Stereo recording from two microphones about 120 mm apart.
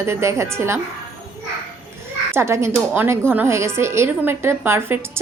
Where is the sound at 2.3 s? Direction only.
20° right (ahead or behind).